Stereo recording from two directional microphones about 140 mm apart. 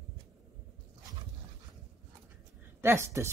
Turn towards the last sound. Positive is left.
turn(degrees=-20)  # may be behind; listen again after turning